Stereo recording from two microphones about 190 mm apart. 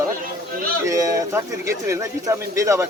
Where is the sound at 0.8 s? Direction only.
15° right (ahead or behind).